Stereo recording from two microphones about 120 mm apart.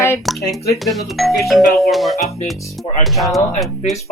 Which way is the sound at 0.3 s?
Centre (ahead or behind).